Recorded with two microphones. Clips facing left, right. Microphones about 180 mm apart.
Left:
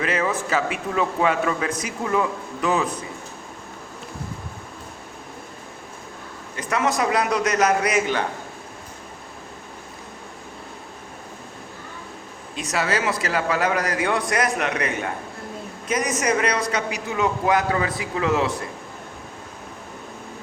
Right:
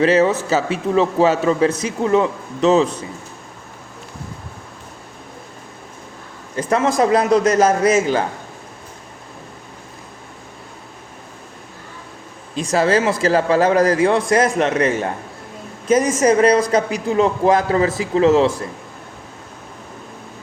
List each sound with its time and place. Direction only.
0.0 s speech: 30° right (ahead or behind)
6.6 s speech: 30° right (ahead or behind)
12.5 s speech: 30° right (ahead or behind)